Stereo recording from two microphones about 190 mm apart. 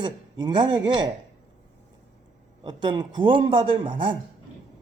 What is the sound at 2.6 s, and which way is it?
Speech, 25° right (ahead or behind).